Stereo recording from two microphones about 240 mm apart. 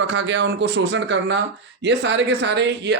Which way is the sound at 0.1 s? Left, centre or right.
Right.